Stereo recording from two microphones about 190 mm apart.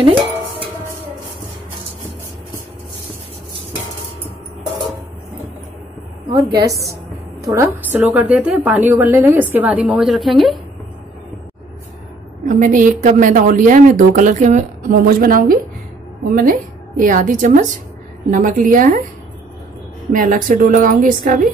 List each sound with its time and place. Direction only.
0.0 s music: 25° right (ahead or behind)
6.2 s a sound: 20° right (ahead or behind)
7.4 s a woman's voice: 15° right (ahead or behind)
12.4 s a woman's voice: 45° right (ahead or behind)
20.1 s a woman's voice: 45° right (ahead or behind)